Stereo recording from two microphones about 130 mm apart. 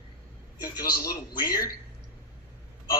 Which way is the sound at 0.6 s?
30° left (ahead or behind).